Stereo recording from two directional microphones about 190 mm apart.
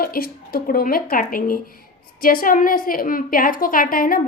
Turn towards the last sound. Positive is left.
turn(degrees=50)  # may be behind; listen again after turning